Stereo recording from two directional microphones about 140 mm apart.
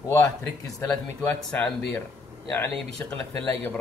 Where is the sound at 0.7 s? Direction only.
25° left (ahead or behind).